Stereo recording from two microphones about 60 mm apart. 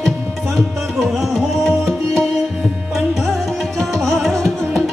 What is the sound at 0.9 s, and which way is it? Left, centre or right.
Tabla, centre.